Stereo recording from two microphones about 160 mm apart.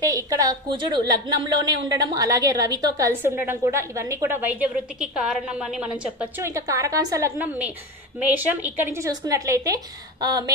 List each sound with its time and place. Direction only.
0.0 s a woman's voice: 20° right (ahead or behind); by 5.9 s 5° right (ahead or behind)
6.4 s a woman's voice: 20° right (ahead or behind)